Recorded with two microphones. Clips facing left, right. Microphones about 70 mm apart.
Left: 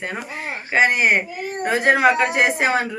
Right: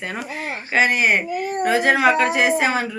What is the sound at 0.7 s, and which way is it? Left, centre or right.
A woman's voice, left.